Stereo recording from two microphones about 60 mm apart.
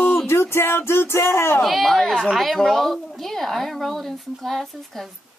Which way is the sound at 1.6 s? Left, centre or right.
Centre.